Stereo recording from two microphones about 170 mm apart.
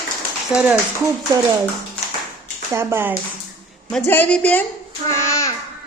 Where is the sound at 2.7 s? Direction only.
15° right (ahead or behind).